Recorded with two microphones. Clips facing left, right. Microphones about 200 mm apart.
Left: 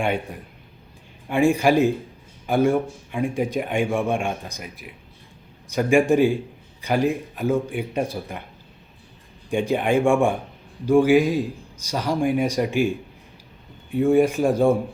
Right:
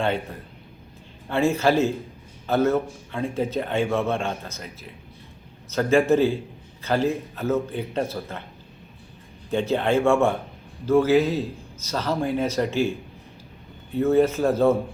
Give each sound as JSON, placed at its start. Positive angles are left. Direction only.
{"t": 0.0, "sound": "a man's voice", "side_deg": 15}
{"t": 9.5, "sound": "a man's voice", "side_deg": 15}
{"t": 13.9, "sound": "a man's voice", "side_deg": 15}